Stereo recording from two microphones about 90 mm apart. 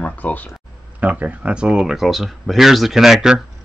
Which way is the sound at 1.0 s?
15° right (ahead or behind).